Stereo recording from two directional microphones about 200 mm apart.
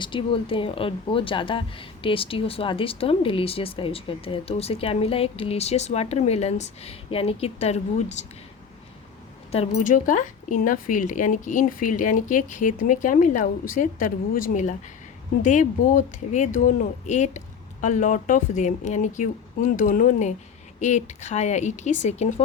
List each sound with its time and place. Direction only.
0.0 s speech: 25° left (ahead or behind)
9.5 s speech: 35° left (ahead or behind)